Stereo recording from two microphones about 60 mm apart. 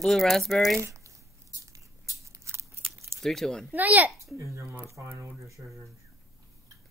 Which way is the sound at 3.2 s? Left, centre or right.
Centre.